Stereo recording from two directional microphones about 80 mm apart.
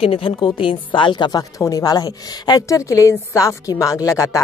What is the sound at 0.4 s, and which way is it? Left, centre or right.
Speech, left.